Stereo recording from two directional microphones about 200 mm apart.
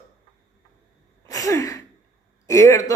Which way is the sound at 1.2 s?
15° left (ahead or behind).